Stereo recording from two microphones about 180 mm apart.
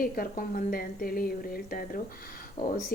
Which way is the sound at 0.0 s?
55° left (ahead or behind).